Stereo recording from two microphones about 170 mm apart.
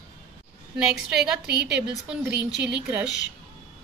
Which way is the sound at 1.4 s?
75° right (ahead or behind).